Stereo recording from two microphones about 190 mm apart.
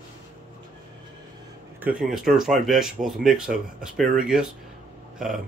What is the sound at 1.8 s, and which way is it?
Speech, 5° right (ahead or behind).